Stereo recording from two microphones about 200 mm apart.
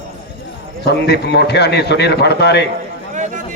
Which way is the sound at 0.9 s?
55° left (ahead or behind).